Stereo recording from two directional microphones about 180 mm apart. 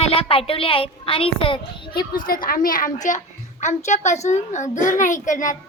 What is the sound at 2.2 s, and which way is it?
A child's voice, 50° left (ahead or behind).